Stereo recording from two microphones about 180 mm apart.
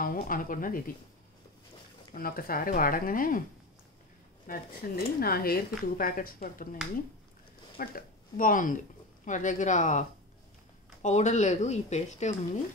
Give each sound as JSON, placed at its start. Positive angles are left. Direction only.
{"t": 0.0, "sound": "speech", "side_deg": 50}
{"t": 2.1, "sound": "speech", "side_deg": 55}
{"t": 4.5, "sound": "speech", "side_deg": 55}
{"t": 7.7, "sound": "speech", "side_deg": 55}